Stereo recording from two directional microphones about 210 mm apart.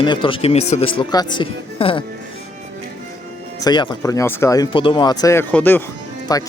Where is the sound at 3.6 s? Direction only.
20° left (ahead or behind).